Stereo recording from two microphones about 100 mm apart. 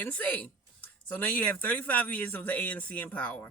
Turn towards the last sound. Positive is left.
turn(degrees=15)  # may be behind; listen again after turning